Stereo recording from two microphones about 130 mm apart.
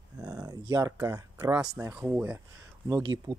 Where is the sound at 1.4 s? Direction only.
10° right (ahead or behind).